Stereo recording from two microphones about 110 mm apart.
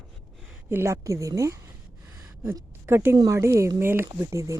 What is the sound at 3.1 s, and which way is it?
Speech, 40° right (ahead or behind).